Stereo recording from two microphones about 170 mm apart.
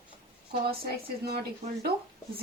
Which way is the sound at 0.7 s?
65° right (ahead or behind).